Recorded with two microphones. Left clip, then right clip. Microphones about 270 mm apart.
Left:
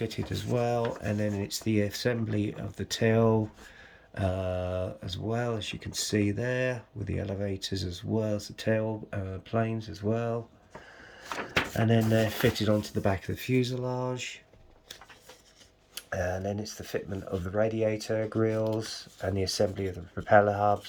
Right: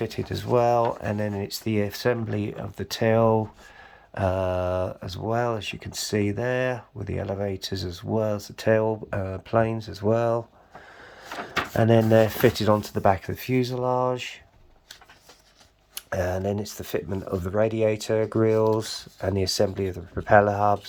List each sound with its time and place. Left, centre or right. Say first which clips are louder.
0.0 s speech: right 4 dB; centre
11.4 s speech: right 6 dB; centre
16.0 s speech: right 5 dB; right
19.5 s speech: right 3 dB; right